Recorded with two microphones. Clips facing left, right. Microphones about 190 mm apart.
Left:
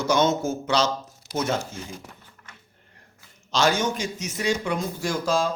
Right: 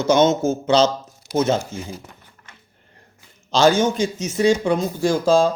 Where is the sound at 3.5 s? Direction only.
30° right (ahead or behind).